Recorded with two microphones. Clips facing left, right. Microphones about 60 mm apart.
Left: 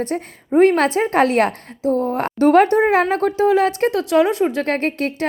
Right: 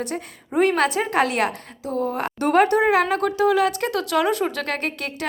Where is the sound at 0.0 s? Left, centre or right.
Left.